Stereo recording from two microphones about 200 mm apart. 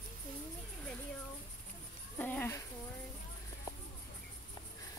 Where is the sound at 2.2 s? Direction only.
10° left (ahead or behind).